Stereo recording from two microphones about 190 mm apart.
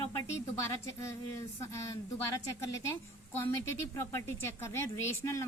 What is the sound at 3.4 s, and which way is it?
Speech, 15° left (ahead or behind).